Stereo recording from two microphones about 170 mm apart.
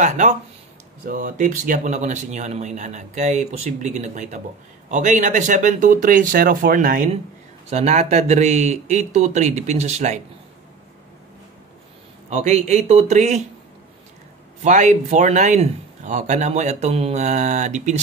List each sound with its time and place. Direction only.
0.0 s speech: 45° right (ahead or behind)
7.7 s speech: 40° right (ahead or behind)
12.3 s speech: 40° right (ahead or behind)
14.6 s speech: 45° right (ahead or behind)